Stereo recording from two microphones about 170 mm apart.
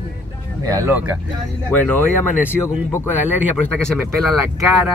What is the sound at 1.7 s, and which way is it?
Speech, 10° left (ahead or behind).